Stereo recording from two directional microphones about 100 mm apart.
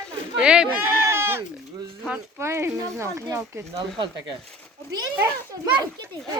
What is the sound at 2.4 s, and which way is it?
Speech, 25° right (ahead or behind).